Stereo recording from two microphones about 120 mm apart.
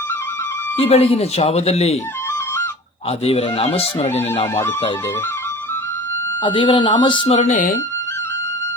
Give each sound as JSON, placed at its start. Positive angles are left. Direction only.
{"t": 0.8, "sound": "speech", "side_deg": 55}
{"t": 3.1, "sound": "speech", "side_deg": 55}
{"t": 6.4, "sound": "speech", "side_deg": 40}
{"t": 7.3, "sound": "speech", "side_deg": 90}